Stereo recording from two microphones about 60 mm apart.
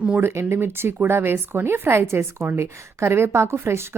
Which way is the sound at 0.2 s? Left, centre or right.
Right.